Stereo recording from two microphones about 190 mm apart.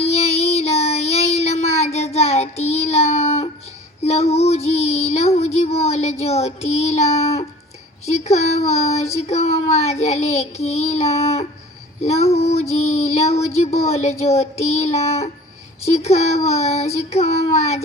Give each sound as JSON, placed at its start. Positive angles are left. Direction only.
{"t": 0.0, "sound": "child singing", "side_deg": 35}
{"t": 8.0, "sound": "speech", "side_deg": 35}